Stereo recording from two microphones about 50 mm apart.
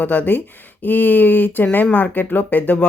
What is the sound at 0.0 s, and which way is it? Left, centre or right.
Speech, left.